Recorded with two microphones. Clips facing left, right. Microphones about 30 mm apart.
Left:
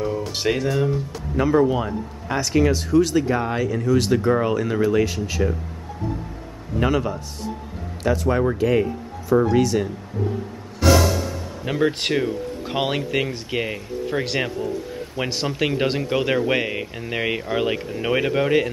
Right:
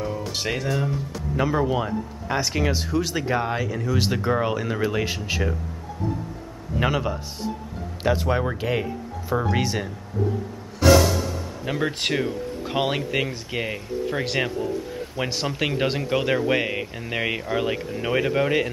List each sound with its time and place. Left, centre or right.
0.0 s speech: centre
4.0 s speech: centre
4.9 s speech: centre
6.8 s speech: centre
8.0 s speech: right
11.6 s speech: centre